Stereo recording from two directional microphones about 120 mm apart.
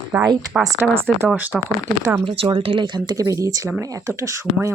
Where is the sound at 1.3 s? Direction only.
15° right (ahead or behind).